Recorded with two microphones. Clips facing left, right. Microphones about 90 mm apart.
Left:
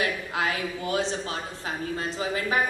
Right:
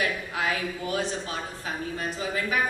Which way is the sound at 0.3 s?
25° left (ahead or behind).